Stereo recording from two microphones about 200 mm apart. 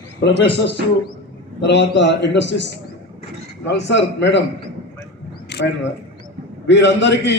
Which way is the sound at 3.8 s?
65° left (ahead or behind).